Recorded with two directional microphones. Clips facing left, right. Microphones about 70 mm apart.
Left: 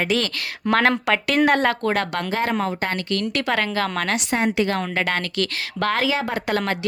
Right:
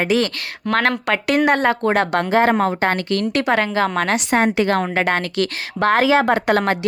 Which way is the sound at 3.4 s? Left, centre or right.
Centre.